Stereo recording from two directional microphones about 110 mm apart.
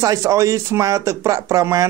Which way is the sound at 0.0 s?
30° right (ahead or behind).